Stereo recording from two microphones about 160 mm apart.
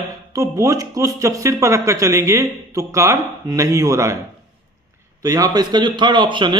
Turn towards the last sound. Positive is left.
turn(degrees=-30)  # may be behind; listen again after turning